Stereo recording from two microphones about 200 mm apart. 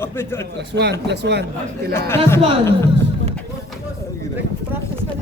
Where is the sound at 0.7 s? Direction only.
60° right (ahead or behind).